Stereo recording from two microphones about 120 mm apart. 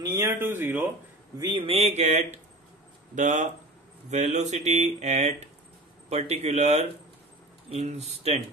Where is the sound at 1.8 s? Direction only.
65° right (ahead or behind).